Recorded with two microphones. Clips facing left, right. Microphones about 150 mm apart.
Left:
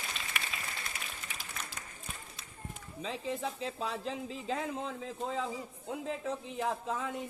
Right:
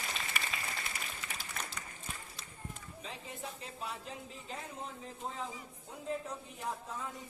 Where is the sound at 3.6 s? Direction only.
90° left.